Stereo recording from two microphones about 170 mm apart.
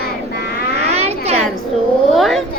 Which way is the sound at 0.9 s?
40° right (ahead or behind).